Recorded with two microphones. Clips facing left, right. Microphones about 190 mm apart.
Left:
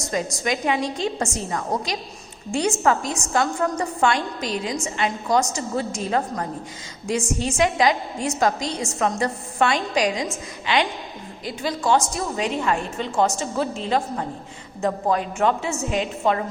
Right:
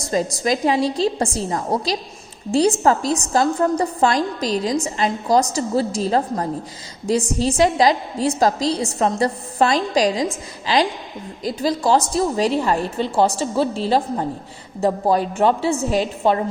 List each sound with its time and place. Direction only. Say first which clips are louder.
0.0 s a woman's voice: right 4 dB; 35° right (ahead or behind)